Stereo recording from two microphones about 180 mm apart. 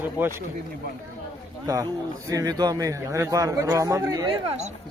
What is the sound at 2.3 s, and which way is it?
A man's voice, 20° right (ahead or behind).